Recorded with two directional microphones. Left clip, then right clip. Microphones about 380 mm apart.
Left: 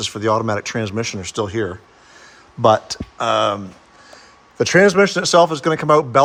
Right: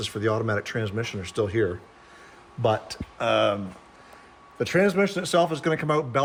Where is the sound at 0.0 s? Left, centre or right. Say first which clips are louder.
Left 8 dB; centre.